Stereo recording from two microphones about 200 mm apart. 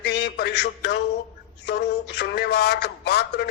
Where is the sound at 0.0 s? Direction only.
55° left (ahead or behind).